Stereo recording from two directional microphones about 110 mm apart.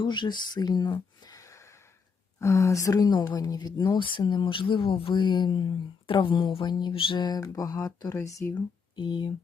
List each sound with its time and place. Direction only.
0.0 s speech: 45° left (ahead or behind)
1.2 s gasp: 30° left (ahead or behind)
2.4 s speech: 30° left (ahead or behind)
9.0 s speech: 45° left (ahead or behind)